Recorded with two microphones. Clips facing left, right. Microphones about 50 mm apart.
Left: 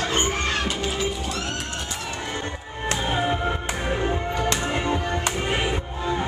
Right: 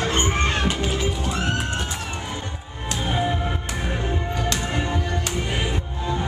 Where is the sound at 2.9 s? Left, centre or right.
Centre.